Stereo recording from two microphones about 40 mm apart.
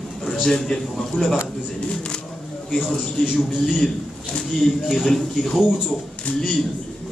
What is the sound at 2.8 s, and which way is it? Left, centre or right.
Speech, centre.